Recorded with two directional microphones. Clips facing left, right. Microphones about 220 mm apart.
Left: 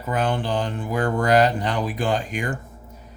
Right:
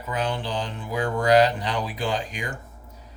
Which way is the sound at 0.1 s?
50° left (ahead or behind).